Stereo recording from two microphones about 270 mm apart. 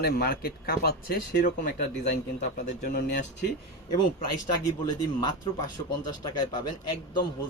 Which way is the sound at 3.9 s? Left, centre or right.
Centre.